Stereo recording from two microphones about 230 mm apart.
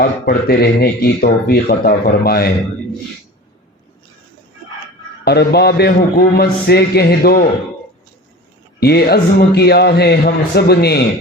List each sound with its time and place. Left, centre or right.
0.0 s speech: left
5.2 s speech: left
8.8 s speech: left